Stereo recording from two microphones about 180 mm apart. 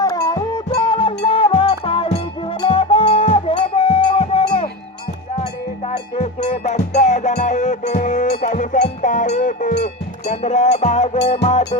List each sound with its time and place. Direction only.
0.0 s music: 20° left (ahead or behind)
6.1 s music: 40° left (ahead or behind)
9.8 s cowbell: 40° left (ahead or behind)